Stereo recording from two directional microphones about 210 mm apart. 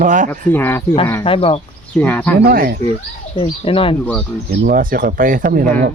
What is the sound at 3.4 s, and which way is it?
Speech, 25° left (ahead or behind).